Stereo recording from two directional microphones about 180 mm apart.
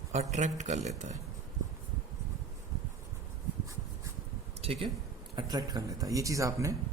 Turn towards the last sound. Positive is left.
turn(degrees=-15)  # may be behind; listen again after turning